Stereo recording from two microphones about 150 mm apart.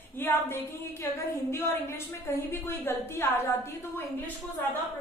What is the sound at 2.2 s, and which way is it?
A woman's voice, 15° left (ahead or behind).